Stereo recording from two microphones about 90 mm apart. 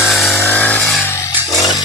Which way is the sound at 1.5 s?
45° left (ahead or behind).